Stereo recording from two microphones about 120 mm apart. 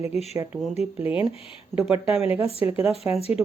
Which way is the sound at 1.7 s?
10° right (ahead or behind).